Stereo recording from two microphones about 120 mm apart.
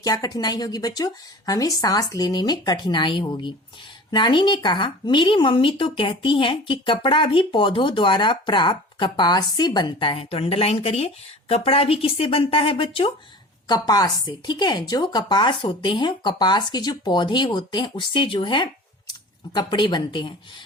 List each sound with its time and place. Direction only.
0.0 s a woman's voice: 35° left (ahead or behind)
13.7 s speech: 35° left (ahead or behind)